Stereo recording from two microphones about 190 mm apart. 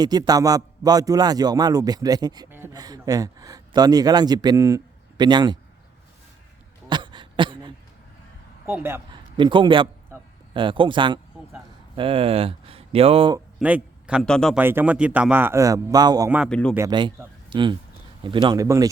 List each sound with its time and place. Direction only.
0.0 s a man's voice: 20° right (ahead or behind)
6.8 s a sound: 25° right (ahead or behind)
8.6 s a man's voice: 10° right (ahead or behind)
9.4 s a man's voice: 25° right (ahead or behind)
13.6 s a man's voice: 5° right (ahead or behind)
14.6 s a man's voice: 10° right (ahead or behind)
16.5 s speech: 5° left (ahead or behind)
16.7 s a man's voice: 20° right (ahead or behind)